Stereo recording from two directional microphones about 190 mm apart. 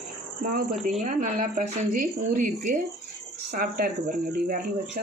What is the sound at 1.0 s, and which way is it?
Speech, 40° right (ahead or behind).